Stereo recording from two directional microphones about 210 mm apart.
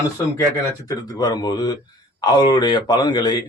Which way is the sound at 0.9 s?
20° left (ahead or behind).